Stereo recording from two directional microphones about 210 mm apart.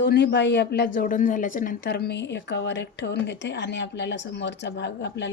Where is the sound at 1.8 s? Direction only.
50° left (ahead or behind).